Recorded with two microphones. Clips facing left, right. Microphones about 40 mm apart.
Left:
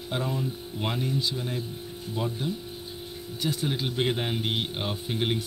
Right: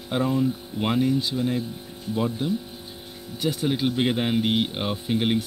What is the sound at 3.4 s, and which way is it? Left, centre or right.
Speech, right.